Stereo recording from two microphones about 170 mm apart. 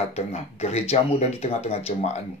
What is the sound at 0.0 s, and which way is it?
Speech, 40° left (ahead or behind).